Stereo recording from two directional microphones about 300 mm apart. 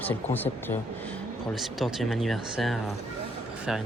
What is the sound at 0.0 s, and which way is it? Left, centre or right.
Speech, centre.